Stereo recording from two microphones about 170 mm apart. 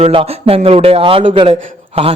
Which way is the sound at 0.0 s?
30° right (ahead or behind).